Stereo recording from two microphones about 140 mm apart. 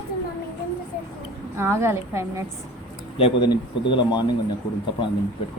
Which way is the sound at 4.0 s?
30° left (ahead or behind).